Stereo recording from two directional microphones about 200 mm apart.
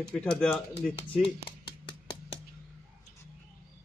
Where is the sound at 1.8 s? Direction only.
20° left (ahead or behind).